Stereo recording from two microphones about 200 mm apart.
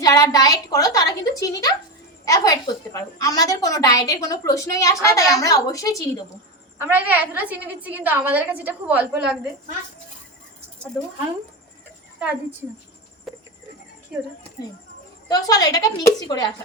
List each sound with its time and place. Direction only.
0.0 s speech: 20° left (ahead or behind)
6.7 s a woman's voice: 10° right (ahead or behind)
12.2 s a woman's voice: 10° right (ahead or behind)
13.3 s a sound: centre (ahead or behind)
15.3 s speech: 20° left (ahead or behind)